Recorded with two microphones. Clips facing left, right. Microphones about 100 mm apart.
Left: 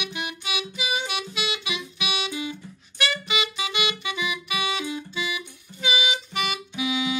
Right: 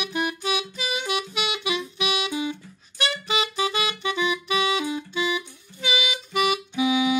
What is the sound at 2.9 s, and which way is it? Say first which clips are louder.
Music: right 1 dB; 35° right (ahead or behind).